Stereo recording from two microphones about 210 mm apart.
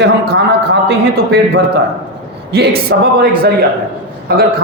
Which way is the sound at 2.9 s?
55° right (ahead or behind).